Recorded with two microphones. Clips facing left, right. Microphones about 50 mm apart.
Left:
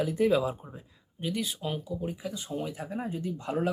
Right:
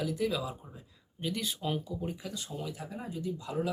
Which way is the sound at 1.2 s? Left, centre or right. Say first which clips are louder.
Left 2 dB; centre.